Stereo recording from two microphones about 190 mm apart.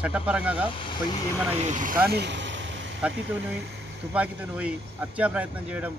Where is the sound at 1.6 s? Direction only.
40° right (ahead or behind).